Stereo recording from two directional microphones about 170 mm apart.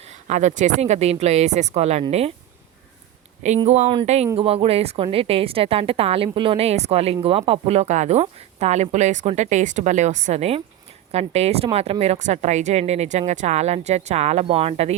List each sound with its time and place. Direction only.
0.0 s a woman's voice: 45° right (ahead or behind)
3.7 s a woman's voice: 40° right (ahead or behind)